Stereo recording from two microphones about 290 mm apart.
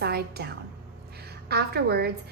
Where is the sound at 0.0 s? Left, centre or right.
Right.